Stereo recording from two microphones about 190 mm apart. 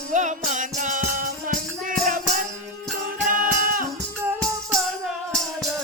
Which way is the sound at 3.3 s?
45° right (ahead or behind).